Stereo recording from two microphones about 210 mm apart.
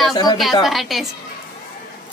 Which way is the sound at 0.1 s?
20° left (ahead or behind).